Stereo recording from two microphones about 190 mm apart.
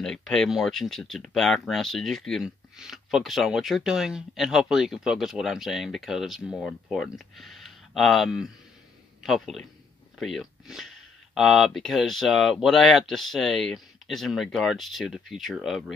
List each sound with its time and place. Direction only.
0.0 s speech: 5° left (ahead or behind)